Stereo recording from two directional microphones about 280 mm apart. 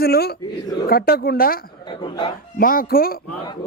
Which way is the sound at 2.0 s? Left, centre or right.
Centre.